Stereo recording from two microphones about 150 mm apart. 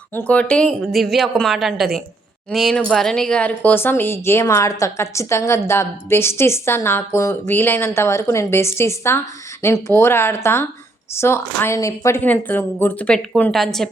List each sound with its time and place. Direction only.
0.1 s a woman's voice: 10° left (ahead or behind)